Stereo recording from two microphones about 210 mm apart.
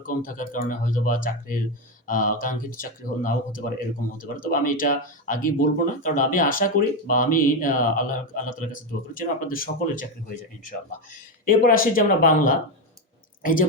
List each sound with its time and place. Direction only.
0.0 s speech: 40° left (ahead or behind)